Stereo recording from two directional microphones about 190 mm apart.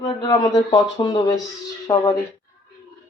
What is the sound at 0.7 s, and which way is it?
Speech, 20° left (ahead or behind).